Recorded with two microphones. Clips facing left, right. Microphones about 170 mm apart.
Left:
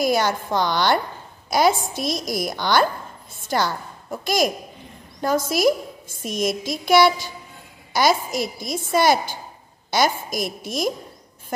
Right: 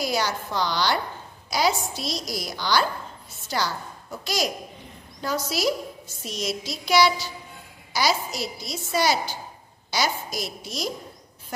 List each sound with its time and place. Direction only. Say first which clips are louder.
0.0 s a woman's voice: left 6 dB; 50° left (ahead or behind)